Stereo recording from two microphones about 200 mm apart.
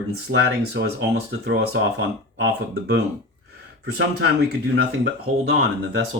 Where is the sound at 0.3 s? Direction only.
60° right (ahead or behind).